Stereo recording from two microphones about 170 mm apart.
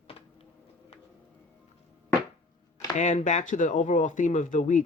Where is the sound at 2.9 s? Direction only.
45° left (ahead or behind).